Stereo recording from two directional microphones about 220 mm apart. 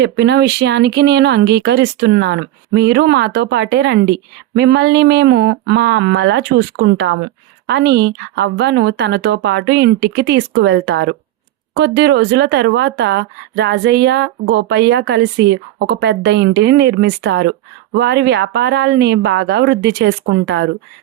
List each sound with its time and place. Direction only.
0.0 s speech: 50° right (ahead or behind)